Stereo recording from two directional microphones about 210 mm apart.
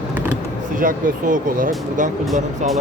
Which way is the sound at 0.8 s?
40° right (ahead or behind).